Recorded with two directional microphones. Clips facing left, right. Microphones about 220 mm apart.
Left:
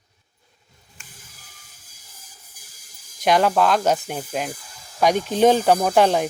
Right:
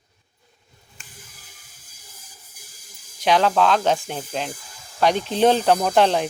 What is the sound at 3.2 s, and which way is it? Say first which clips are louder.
Speech: even; 10° left (ahead or behind).